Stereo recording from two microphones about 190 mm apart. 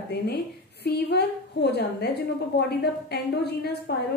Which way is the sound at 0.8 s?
60° left (ahead or behind).